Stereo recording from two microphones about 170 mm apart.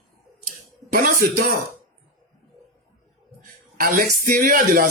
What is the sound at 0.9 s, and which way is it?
Speech, 55° right (ahead or behind).